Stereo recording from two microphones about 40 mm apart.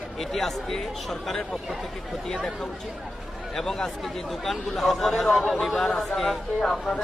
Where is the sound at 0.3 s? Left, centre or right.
Centre.